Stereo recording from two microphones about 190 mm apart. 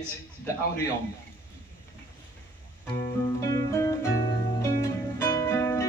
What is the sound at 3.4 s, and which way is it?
Music, 15° left (ahead or behind).